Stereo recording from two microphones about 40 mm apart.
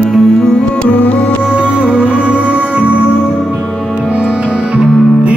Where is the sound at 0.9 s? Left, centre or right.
Left.